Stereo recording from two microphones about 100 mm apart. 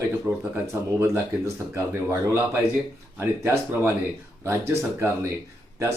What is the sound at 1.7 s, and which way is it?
Speech, 25° right (ahead or behind).